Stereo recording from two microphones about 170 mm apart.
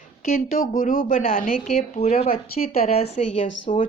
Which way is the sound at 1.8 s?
35° left (ahead or behind).